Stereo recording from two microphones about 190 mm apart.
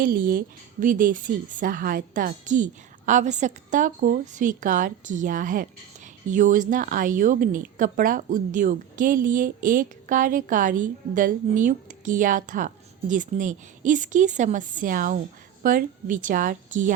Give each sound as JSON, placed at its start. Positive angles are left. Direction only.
{"t": 0.0, "sound": "speech", "side_deg": -45}